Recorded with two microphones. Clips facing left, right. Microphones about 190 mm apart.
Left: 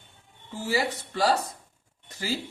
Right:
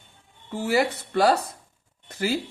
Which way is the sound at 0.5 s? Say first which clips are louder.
Right 5 dB; 60° right (ahead or behind).